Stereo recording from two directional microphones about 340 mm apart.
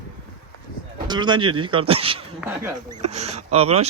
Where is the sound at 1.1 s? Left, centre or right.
Centre.